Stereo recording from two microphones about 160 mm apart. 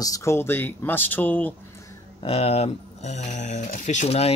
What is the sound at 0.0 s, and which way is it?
Speech, 20° left (ahead or behind).